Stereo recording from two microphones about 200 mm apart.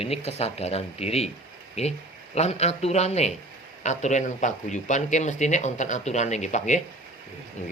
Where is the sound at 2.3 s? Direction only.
35° left (ahead or behind).